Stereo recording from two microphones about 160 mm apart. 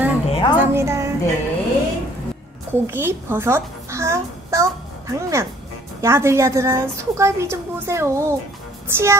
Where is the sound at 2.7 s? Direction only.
15° right (ahead or behind).